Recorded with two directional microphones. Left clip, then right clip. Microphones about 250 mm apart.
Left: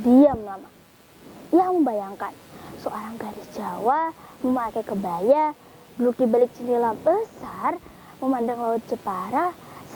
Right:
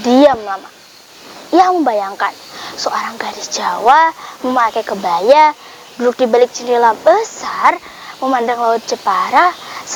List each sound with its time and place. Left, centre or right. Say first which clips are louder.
0.0 s speech: right 8 dB; centre
1.6 s a woman's voice: right 10 dB; centre
3.7 s speech: right 13 dB; centre
5.3 s speech: right 11 dB; centre